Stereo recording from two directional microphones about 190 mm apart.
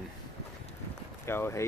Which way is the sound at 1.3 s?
15° left (ahead or behind).